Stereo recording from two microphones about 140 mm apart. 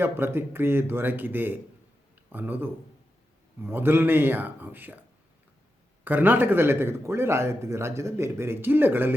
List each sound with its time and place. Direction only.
0.0 s a man's voice: 15° right (ahead or behind)
6.1 s a man's voice: 15° right (ahead or behind)